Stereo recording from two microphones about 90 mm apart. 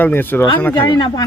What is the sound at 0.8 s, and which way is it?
Speech, 50° left (ahead or behind).